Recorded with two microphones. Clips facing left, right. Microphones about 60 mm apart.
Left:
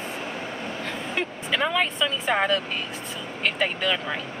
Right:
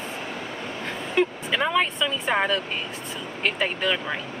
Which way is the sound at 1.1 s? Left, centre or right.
Centre.